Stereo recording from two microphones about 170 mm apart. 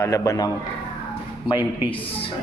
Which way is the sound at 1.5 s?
30° left (ahead or behind).